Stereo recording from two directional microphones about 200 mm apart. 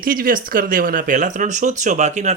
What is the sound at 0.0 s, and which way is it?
Speech, 45° right (ahead or behind).